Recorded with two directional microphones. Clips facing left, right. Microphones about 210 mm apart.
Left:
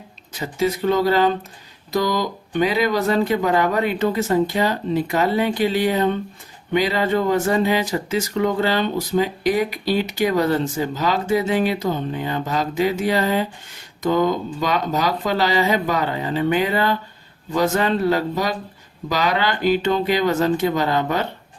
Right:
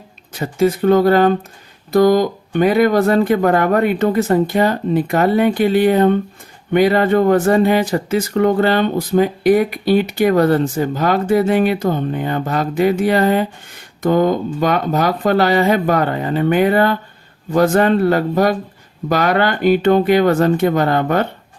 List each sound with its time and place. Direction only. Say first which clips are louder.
0.3 s speech: right 6 dB; 50° right (ahead or behind)